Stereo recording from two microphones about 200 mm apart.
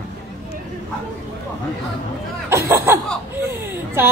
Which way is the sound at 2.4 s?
15° right (ahead or behind).